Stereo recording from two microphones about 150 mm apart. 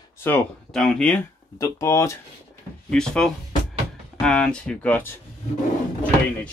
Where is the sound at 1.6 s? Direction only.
20° left (ahead or behind).